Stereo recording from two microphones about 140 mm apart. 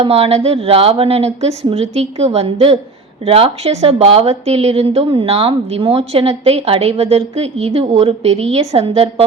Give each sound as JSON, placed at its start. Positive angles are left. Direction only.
{"t": 0.0, "sound": "a woman's voice", "side_deg": -45}